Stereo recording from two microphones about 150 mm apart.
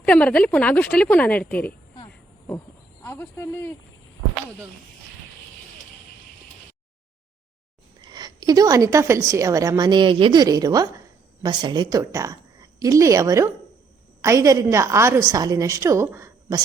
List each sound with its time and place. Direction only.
0.0 s a woman's voice: 10° left (ahead or behind)
3.0 s a woman's voice: 15° left (ahead or behind)
8.0 s a woman's voice: 25° right (ahead or behind)